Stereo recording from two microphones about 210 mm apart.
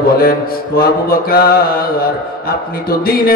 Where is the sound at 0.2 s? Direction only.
45° left (ahead or behind).